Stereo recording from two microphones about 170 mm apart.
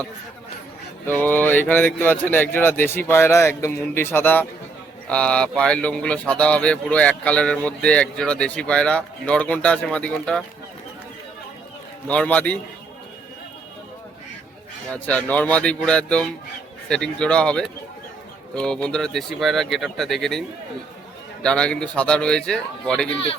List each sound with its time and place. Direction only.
1.0 s speech: 10° left (ahead or behind)
12.0 s speech: 5° left (ahead or behind)
14.9 s speech: 10° left (ahead or behind)
21.4 s speech: 5° left (ahead or behind)
23.1 s speech: 35° left (ahead or behind)